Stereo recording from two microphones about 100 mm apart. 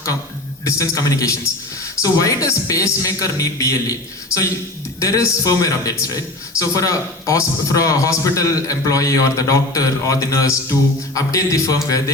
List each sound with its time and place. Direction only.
0.6 s a man's voice: 35° left (ahead or behind)
4.9 s a man's voice: 30° left (ahead or behind)